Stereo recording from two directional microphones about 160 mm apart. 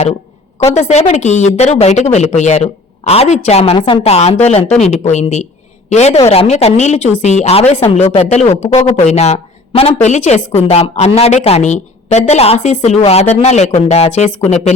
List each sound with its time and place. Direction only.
0.6 s a woman's voice: 45° left (ahead or behind)
3.8 s a woman's voice: 30° left (ahead or behind)
4.0 s a woman's voice: 40° left (ahead or behind)